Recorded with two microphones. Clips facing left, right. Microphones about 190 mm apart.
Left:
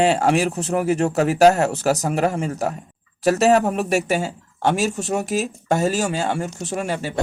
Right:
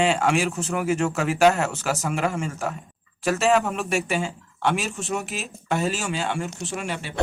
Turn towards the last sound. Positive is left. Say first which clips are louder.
# left 4 dB
turn(degrees=40)  # may be behind; listen again after turning